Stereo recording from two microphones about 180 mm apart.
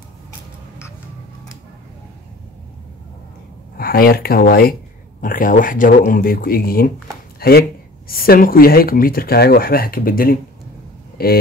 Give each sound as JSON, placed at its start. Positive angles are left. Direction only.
{"t": 3.7, "sound": "speech", "side_deg": 55}
{"t": 7.3, "sound": "a sound", "side_deg": 60}
{"t": 8.1, "sound": "speech", "side_deg": 55}